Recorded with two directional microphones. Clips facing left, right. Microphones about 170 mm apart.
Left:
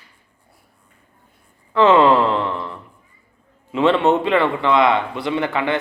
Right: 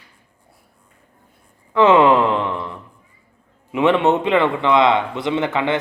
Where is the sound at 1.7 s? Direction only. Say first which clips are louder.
Even; 20° right (ahead or behind).